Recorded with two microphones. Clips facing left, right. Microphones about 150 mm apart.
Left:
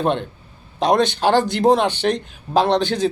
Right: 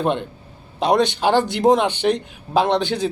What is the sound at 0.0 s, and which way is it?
Speech, 15° right (ahead or behind).